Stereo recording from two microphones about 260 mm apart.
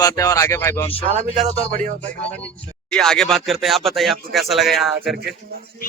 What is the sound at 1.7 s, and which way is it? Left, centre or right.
Speech, right.